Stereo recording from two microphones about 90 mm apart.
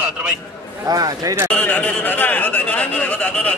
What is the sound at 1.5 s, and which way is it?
Speech, 15° left (ahead or behind).